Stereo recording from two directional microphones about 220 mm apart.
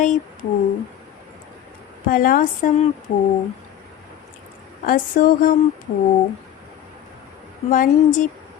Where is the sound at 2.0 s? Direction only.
40° left (ahead or behind).